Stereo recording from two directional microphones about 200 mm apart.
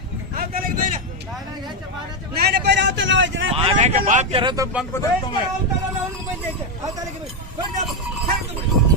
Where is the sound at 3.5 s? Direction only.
30° right (ahead or behind).